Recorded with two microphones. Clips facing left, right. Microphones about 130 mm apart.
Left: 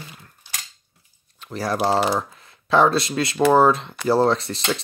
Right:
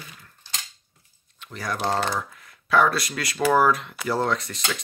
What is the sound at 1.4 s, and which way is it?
Speech, 35° left (ahead or behind).